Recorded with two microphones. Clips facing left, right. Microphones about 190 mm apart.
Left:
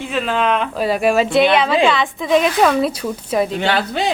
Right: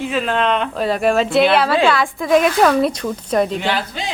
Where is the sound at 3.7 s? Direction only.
65° left (ahead or behind).